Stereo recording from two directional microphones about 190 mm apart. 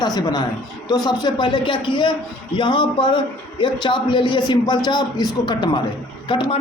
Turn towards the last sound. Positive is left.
turn(degrees=25)  # may be behind; listen again after turning